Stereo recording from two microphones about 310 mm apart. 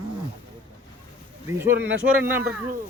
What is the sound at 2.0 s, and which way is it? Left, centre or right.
Speech, centre.